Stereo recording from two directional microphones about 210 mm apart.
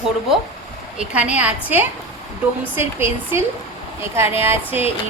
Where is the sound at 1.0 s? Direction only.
5° right (ahead or behind).